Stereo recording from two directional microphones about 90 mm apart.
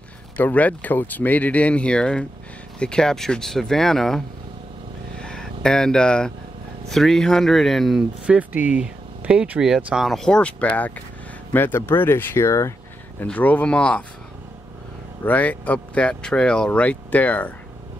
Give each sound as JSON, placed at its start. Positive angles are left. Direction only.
{"t": 0.4, "sound": "speech", "side_deg": 15}
{"t": 5.2, "sound": "speech", "side_deg": 10}
{"t": 8.3, "sound": "speech", "side_deg": -15}
{"t": 10.0, "sound": "speech", "side_deg": 5}
{"t": 13.2, "sound": "speech", "side_deg": 15}
{"t": 15.2, "sound": "speech", "side_deg": 20}